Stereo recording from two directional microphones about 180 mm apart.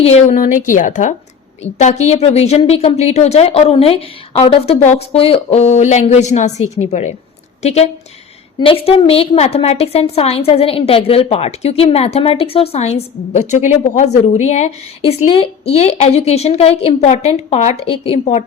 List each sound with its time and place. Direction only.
0.0 s a woman's voice: 40° left (ahead or behind)